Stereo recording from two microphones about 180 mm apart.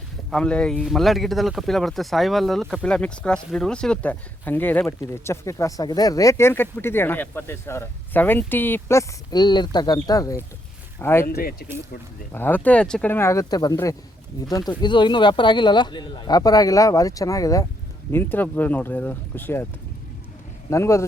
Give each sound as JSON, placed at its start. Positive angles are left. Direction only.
{"t": 0.3, "sound": "speech", "side_deg": 5}
{"t": 11.3, "sound": "speech", "side_deg": 60}
{"t": 12.3, "sound": "speech", "side_deg": 10}
{"t": 20.7, "sound": "speech", "side_deg": 15}